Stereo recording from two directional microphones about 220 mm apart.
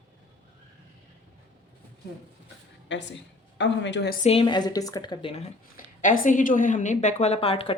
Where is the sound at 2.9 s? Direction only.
55° left (ahead or behind).